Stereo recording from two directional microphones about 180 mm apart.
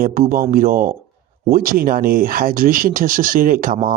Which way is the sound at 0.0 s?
50° right (ahead or behind).